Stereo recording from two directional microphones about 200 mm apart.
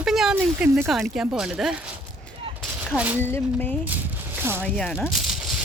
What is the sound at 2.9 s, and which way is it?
Speech, 10° right (ahead or behind).